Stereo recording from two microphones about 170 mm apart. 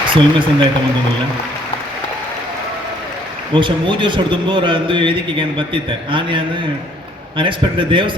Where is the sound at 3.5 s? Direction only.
30° right (ahead or behind).